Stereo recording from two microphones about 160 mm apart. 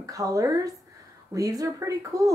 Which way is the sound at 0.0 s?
20° right (ahead or behind).